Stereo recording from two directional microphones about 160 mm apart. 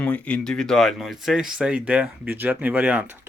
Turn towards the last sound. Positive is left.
turn(degrees=-10)  # may be behind; listen again after turning